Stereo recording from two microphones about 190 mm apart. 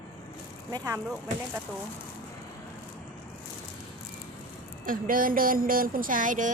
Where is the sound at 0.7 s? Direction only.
15° right (ahead or behind).